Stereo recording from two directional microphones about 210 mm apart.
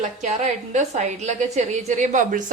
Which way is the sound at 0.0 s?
35° right (ahead or behind).